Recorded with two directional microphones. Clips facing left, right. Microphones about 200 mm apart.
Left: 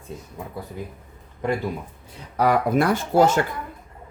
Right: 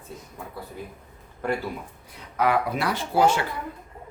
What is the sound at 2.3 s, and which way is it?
Speech, 40° left (ahead or behind).